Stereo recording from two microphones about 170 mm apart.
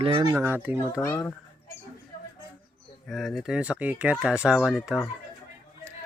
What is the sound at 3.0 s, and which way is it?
Speech, centre (ahead or behind).